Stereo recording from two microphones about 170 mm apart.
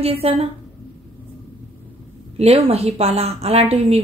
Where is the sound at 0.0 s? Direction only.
35° right (ahead or behind).